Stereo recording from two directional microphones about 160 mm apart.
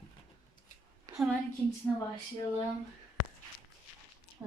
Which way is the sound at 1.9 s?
Centre (ahead or behind).